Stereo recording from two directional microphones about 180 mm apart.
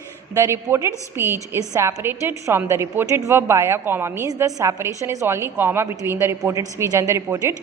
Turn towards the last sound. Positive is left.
turn(degrees=-15)  # may be behind; listen again after turning